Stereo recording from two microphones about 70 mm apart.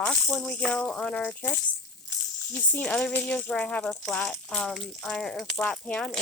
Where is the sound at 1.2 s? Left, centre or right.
Left.